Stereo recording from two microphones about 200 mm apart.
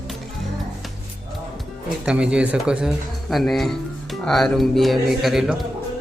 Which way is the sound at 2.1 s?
5° right (ahead or behind).